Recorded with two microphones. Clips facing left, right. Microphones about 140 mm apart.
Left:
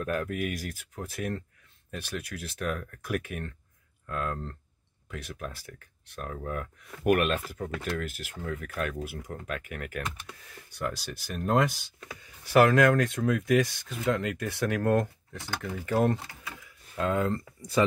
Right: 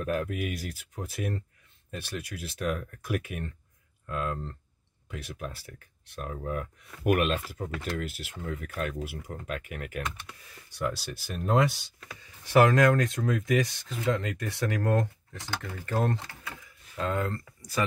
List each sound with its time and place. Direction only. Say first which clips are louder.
0.0 s speech: even; centre (ahead or behind)
16.5 s a sound: left 3 dB; 5° left (ahead or behind)
17.6 s speech: left 6 dB; 25° left (ahead or behind)